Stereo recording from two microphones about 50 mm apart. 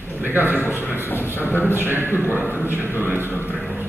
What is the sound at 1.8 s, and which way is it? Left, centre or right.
A man's voice, right.